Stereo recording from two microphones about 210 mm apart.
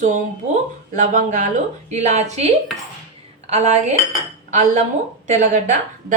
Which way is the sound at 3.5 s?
35° right (ahead or behind).